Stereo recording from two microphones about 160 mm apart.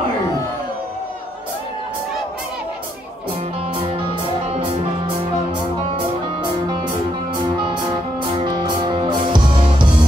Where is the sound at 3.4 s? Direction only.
35° right (ahead or behind).